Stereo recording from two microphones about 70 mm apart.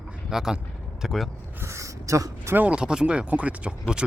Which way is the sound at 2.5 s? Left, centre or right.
Centre.